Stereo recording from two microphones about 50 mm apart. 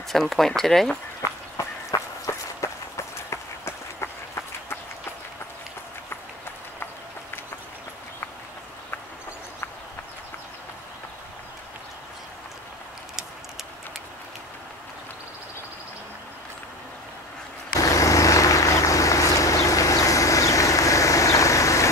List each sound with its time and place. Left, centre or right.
0.1 s speech: centre
1.6 s a sound: left
2.2 s run: left
17.9 s vehicle: left